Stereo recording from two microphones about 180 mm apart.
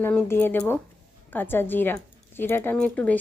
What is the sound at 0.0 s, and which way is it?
Speech, 10° left (ahead or behind).